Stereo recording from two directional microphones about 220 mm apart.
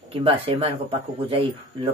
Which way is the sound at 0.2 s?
25° right (ahead or behind).